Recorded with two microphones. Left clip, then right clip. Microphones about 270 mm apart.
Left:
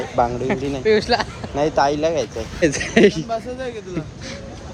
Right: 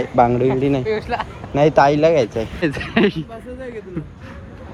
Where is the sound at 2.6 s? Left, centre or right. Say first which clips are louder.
Left 5 dB; centre.